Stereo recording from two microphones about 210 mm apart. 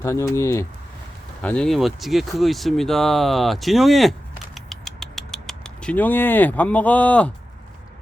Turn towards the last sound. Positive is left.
turn(degrees=5)  # may be behind; listen again after turning